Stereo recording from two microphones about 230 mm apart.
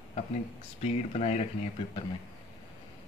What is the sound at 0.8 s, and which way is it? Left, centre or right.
Speech, left.